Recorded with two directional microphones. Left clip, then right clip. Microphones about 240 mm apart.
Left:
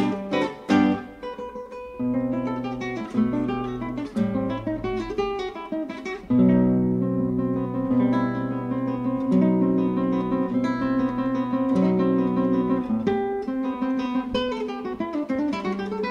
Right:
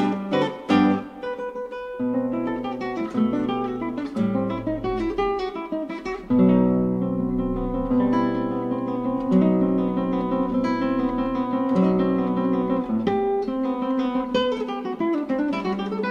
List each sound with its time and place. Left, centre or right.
0.3 s music: left
6.3 s music: left
7.9 s guitar: left
9.3 s guitar: left
11.7 s guitar: left
13.9 s guitar: left